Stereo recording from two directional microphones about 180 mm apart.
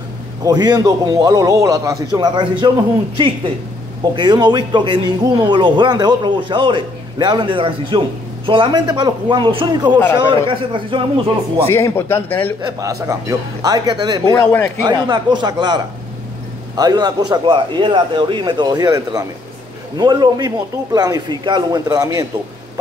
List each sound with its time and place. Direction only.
0.4 s a man's voice: 20° right (ahead or behind)
4.0 s a man's voice: 25° right (ahead or behind)
11.6 s speech: 15° left (ahead or behind)
12.6 s a man's voice: 20° right (ahead or behind)
14.4 s speech: 10° left (ahead or behind)
14.9 s a man's voice: 25° right (ahead or behind)